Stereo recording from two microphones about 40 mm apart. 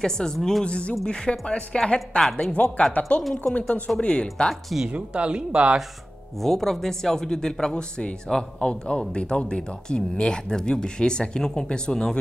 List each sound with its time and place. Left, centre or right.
0.0 s speech: centre
0.4 s speech: centre
0.7 s speech: left
2.0 s a woman's voice: centre
2.6 s speech: left
4.8 s speech: right
6.4 s speech: centre